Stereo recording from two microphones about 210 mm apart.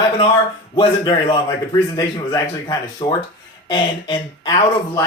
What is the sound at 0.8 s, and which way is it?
Speech, 20° left (ahead or behind).